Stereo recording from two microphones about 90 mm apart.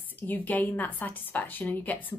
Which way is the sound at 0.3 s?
20° left (ahead or behind).